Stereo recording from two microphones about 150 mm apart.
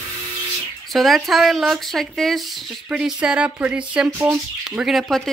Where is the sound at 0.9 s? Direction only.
Centre (ahead or behind).